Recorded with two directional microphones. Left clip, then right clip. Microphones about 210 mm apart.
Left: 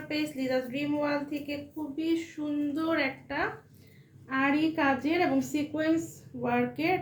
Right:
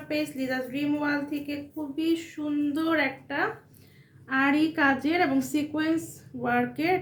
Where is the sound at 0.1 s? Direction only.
15° right (ahead or behind).